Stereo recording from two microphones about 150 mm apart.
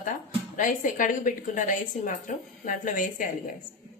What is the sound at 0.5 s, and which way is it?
A woman's voice, 60° left (ahead or behind).